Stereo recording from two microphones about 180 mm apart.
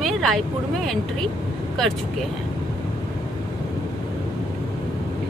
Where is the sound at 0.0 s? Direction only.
Centre (ahead or behind).